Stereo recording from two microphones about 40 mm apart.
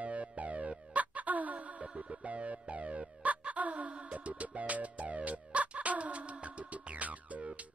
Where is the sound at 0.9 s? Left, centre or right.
Right.